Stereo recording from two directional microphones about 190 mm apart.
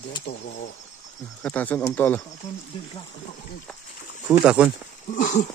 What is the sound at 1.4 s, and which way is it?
Speech, 10° left (ahead or behind).